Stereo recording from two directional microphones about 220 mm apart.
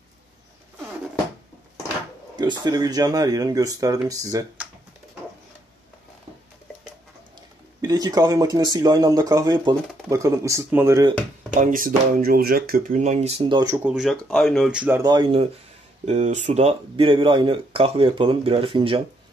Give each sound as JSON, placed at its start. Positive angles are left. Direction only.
{"t": 2.3, "sound": "speech", "side_deg": -20}
{"t": 7.8, "sound": "speech", "side_deg": -15}
{"t": 11.5, "sound": "speech", "side_deg": -35}
{"t": 13.8, "sound": "speech", "side_deg": 0}
{"t": 15.0, "sound": "speech", "side_deg": -20}
{"t": 16.1, "sound": "speech", "side_deg": -30}